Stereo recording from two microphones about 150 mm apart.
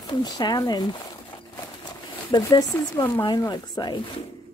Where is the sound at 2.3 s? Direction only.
25° left (ahead or behind).